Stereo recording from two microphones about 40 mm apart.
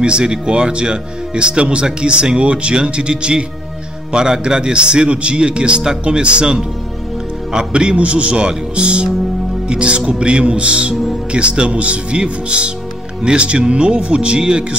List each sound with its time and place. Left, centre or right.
0.0 s a man's voice: right
7.7 s a man's voice: right